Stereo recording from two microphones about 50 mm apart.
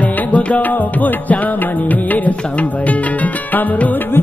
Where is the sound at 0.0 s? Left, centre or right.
Left.